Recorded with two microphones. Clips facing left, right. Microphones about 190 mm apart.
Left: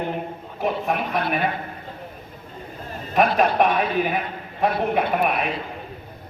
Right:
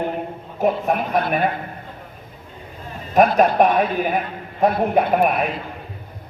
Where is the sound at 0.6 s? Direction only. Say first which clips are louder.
Right 4 dB; 45° right (ahead or behind).